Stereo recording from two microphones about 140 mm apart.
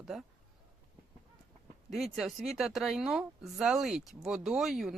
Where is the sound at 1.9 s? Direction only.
Centre (ahead or behind).